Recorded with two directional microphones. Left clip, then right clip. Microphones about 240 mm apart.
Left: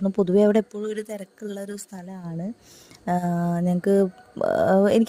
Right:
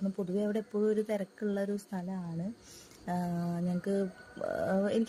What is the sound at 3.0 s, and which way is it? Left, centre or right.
Mantra, left.